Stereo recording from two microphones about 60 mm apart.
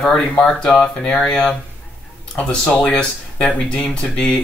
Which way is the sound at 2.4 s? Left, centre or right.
Left.